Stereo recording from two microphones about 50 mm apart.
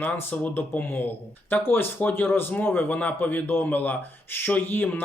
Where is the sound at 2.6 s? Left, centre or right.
Left.